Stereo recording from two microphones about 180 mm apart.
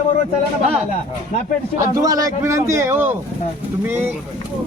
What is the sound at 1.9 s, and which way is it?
Speech, 20° right (ahead or behind).